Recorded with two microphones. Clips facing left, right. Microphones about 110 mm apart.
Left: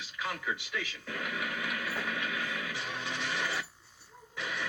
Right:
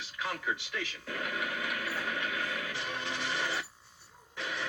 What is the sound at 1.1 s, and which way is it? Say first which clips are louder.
Music: right 1 dB; centre (ahead or behind).